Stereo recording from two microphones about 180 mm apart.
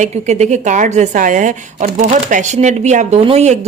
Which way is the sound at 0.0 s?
40° right (ahead or behind).